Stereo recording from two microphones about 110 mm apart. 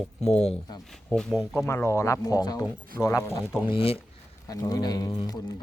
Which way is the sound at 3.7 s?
60° left (ahead or behind).